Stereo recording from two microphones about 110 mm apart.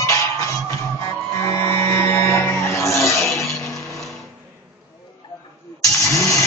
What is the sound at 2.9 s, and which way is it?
Music, 25° left (ahead or behind).